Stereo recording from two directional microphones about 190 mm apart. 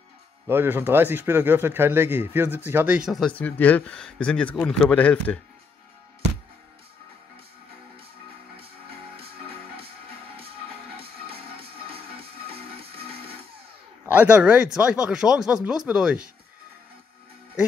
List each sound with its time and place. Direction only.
0.5 s speech: 10° right (ahead or behind); by 5.4 s 5° left (ahead or behind)
11.0 s music: 30° right (ahead or behind)
12.4 s music: 30° right (ahead or behind)
14.0 s speech: 10° right (ahead or behind)